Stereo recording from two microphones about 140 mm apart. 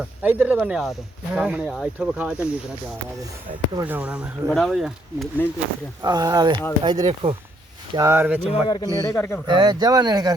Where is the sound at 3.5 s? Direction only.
70° right (ahead or behind).